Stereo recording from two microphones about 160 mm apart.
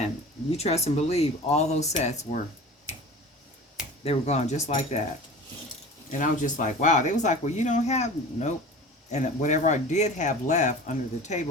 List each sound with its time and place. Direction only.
0.5 s speech: 40° left (ahead or behind)
4.0 s speech: 40° left (ahead or behind)
6.1 s speech: 50° left (ahead or behind)